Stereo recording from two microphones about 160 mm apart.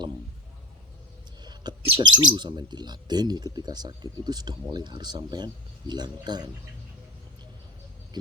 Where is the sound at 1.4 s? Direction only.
25° right (ahead or behind).